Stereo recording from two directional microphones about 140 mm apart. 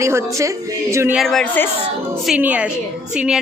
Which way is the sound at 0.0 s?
20° right (ahead or behind).